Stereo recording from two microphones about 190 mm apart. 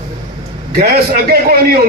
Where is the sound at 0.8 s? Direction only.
55° right (ahead or behind).